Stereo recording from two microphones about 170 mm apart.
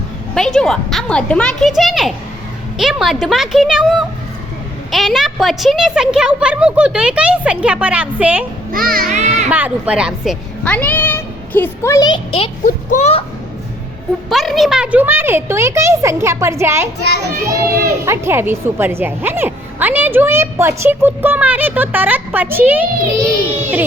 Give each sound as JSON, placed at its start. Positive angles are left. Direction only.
{"t": 0.3, "sound": "a woman's voice", "side_deg": 5}
{"t": 8.7, "sound": "a child's voice", "side_deg": -60}
{"t": 9.1, "sound": "children playing", "side_deg": -45}
{"t": 9.5, "sound": "a woman's voice", "side_deg": -10}
{"t": 10.6, "sound": "speech", "side_deg": 10}
{"t": 12.6, "sound": "a child's voice", "side_deg": 45}
{"t": 14.3, "sound": "a woman's voice", "side_deg": 0}
{"t": 17.3, "sound": "a child's voice", "side_deg": -65}
{"t": 17.8, "sound": "a woman's voice", "side_deg": -15}